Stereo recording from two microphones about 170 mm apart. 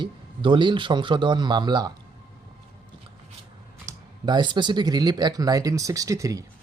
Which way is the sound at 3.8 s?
25° right (ahead or behind).